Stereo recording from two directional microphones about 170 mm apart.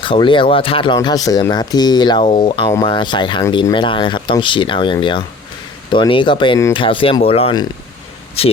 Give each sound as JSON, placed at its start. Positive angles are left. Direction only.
{"t": 0.0, "sound": "speech", "side_deg": 30}